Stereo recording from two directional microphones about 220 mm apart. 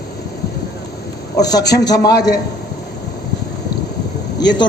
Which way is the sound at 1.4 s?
15° left (ahead or behind).